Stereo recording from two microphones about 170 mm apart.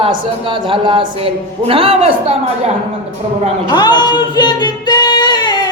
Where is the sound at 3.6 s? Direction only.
25° left (ahead or behind).